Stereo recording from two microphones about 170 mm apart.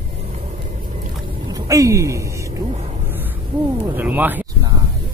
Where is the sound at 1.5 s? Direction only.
20° right (ahead or behind).